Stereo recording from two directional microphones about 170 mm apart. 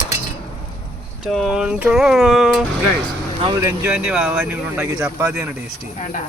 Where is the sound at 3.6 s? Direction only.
15° right (ahead or behind).